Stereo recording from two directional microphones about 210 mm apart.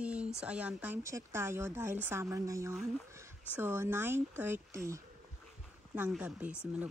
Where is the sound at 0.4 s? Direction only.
5° right (ahead or behind).